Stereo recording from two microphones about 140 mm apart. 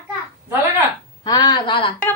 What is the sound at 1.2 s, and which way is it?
Speech, 30° left (ahead or behind).